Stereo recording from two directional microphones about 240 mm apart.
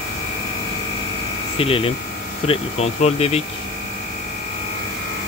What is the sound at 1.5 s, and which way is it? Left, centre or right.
Speech, left.